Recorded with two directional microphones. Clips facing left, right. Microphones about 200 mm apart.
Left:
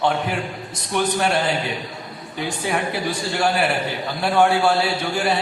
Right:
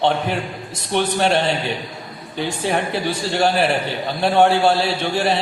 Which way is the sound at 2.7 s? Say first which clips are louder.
Right 2 dB; 30° right (ahead or behind).